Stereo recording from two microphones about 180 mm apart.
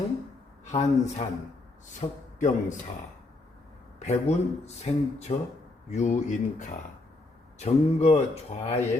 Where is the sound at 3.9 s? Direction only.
40° left (ahead or behind).